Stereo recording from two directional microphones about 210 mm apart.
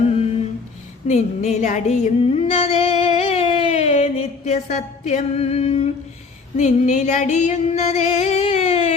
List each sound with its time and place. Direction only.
1.0 s music: 35° left (ahead or behind)